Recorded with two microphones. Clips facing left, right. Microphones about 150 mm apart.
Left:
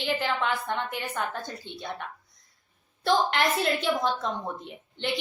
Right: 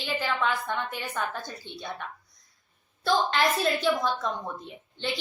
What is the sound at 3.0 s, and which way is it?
Speech, 20° left (ahead or behind).